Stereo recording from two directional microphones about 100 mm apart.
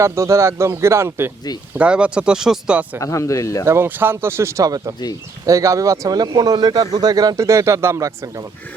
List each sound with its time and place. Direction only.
0.0 s speech: 30° right (ahead or behind)
1.8 s speech: 10° right (ahead or behind)
3.0 s speech: 35° left (ahead or behind)
3.7 s speech: 20° right (ahead or behind)